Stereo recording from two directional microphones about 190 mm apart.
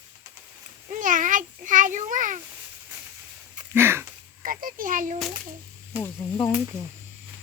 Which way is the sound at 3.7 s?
10° right (ahead or behind).